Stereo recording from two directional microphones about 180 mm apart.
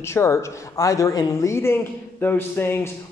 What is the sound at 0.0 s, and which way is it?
A man's voice, 15° left (ahead or behind).